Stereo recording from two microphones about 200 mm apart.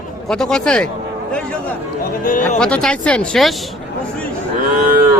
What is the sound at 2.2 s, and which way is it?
Speech, 40° left (ahead or behind).